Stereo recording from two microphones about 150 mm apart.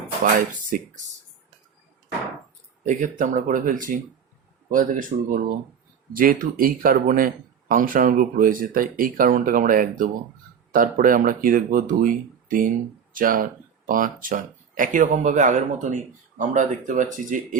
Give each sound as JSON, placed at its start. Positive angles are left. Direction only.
{"t": 0.3, "sound": "speech", "side_deg": -65}
{"t": 2.8, "sound": "speech", "side_deg": -60}